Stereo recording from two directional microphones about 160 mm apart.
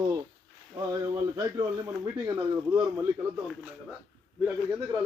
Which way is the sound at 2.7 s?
25° right (ahead or behind).